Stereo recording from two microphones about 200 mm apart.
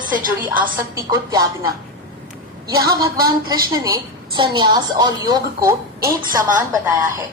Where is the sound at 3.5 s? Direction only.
20° right (ahead or behind).